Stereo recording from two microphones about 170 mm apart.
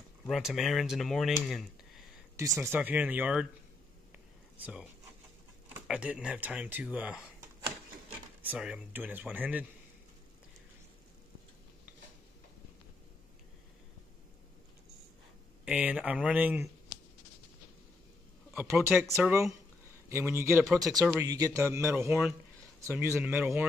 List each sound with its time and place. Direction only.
0.3 s speech: centre (ahead or behind)
2.3 s speech: 20° right (ahead or behind)
4.6 s speech: 10° right (ahead or behind)
8.4 s speech: 5° right (ahead or behind)
15.6 s speech: 5° right (ahead or behind)
18.5 s a man's voice: 10° right (ahead or behind)